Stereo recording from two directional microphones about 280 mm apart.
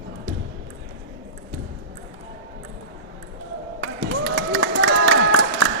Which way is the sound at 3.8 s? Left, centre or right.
Right.